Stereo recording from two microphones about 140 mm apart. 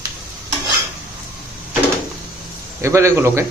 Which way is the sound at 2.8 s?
20° right (ahead or behind).